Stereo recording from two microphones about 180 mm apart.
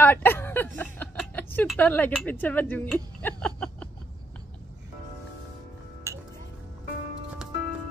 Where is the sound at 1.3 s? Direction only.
10° left (ahead or behind).